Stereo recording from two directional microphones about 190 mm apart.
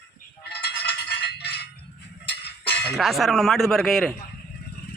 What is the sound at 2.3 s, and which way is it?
Music, 60° left (ahead or behind).